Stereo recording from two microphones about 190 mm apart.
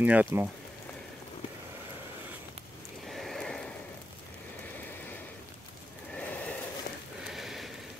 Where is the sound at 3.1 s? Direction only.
Centre (ahead or behind).